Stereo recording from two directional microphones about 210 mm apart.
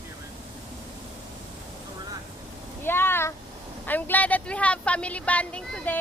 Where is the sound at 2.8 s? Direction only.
10° left (ahead or behind).